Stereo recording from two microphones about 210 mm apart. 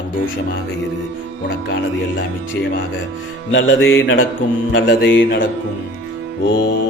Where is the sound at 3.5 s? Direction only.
60° left (ahead or behind).